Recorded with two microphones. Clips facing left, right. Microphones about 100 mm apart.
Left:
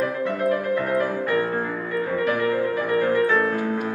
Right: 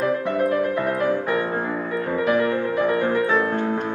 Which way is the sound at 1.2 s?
20° right (ahead or behind).